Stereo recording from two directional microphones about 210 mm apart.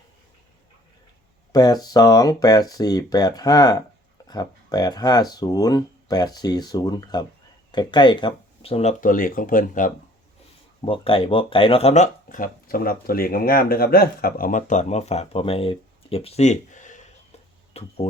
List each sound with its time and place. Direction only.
1.5 s speech: 20° left (ahead or behind); by 9.9 s 40° left (ahead or behind)
10.8 s speech: 25° left (ahead or behind)